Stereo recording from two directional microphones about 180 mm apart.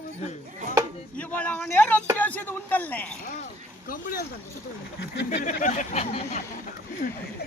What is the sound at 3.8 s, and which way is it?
Speech, 50° left (ahead or behind).